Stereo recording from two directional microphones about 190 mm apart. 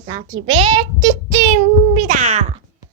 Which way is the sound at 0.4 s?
25° right (ahead or behind).